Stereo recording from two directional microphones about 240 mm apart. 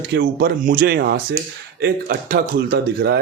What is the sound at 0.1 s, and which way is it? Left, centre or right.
Speech, right.